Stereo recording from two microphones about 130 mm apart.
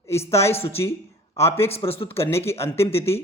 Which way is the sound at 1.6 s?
50° left (ahead or behind).